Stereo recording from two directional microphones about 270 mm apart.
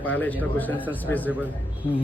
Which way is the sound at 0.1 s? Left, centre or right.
Centre.